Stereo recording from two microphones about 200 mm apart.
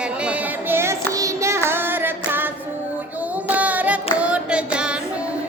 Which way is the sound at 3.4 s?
5° right (ahead or behind).